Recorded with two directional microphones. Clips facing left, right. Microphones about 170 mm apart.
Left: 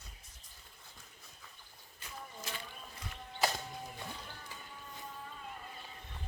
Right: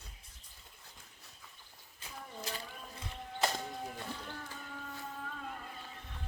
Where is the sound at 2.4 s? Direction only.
35° right (ahead or behind).